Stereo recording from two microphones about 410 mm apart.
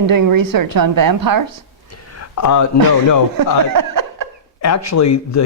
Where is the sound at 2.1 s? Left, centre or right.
Left.